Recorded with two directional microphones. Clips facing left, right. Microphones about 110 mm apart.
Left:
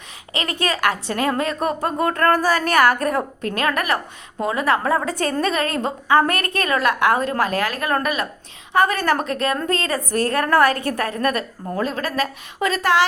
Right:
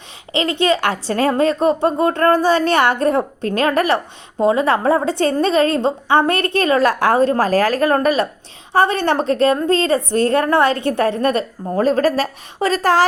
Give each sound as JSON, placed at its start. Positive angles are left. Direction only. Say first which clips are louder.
{"t": 0.3, "sound": "a woman's voice", "louder": "right 7 dB", "side_deg": -25}